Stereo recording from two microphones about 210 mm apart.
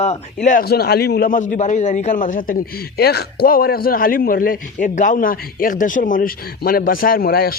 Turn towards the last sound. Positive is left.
turn(degrees=45)  # may be behind; listen again after turning